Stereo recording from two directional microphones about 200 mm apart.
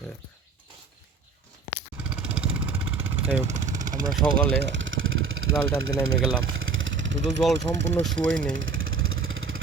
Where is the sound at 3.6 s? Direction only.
40° right (ahead or behind).